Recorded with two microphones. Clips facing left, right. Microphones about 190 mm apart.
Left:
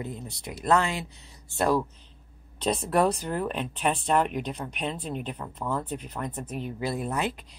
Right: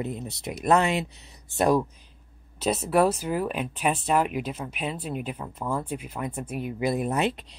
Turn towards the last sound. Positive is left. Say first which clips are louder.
# right 4 dB
turn(degrees=-20)  # may be behind; listen again after turning